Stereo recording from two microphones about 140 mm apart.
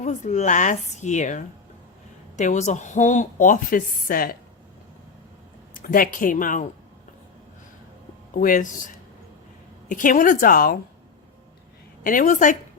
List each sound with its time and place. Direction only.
0.0 s a woman's voice: 60° left (ahead or behind); by 4.4 s 90° left
5.7 s speech: 90° left; by 6.7 s 70° left (ahead or behind)
8.3 s speech: 80° left
9.9 s speech: 75° left (ahead or behind)
12.0 s speech: 80° left